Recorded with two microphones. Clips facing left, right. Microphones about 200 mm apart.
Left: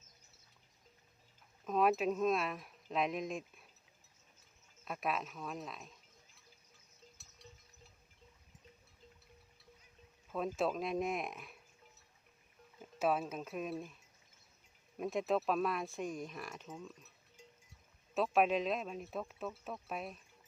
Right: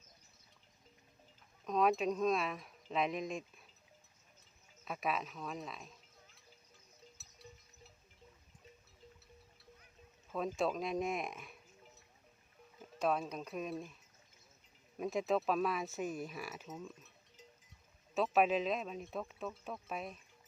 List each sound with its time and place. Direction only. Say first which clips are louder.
1.6 s speech: even; 5° left (ahead or behind)
4.9 s speech: even; centre (ahead or behind)
7.2 s goat: even; 5° right (ahead or behind)
10.3 s speech: even; centre (ahead or behind)
13.0 s speech: left 1 dB; 5° left (ahead or behind)
14.9 s speech: even; centre (ahead or behind)
18.1 s speech: even; centre (ahead or behind)